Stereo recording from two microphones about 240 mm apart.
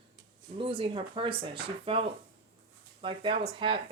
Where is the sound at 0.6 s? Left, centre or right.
Right.